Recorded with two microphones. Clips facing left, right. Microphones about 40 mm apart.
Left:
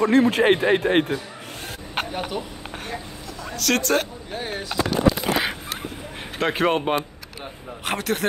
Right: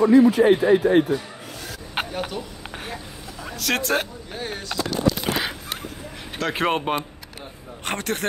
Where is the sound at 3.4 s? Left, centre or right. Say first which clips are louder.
Left 2 dB; centre.